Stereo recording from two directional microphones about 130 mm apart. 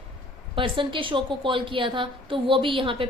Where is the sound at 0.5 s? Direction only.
40° right (ahead or behind).